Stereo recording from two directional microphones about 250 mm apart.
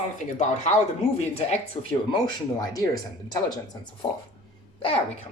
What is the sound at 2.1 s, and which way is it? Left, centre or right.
Speech, centre.